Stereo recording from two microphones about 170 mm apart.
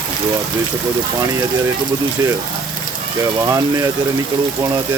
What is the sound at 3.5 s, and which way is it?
Speech, 20° right (ahead or behind).